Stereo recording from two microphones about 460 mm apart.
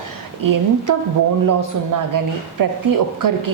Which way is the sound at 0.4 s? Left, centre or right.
Right.